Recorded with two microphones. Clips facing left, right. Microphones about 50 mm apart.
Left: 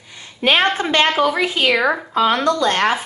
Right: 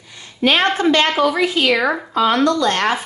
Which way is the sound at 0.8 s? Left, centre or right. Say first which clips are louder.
Right 1 dB; left.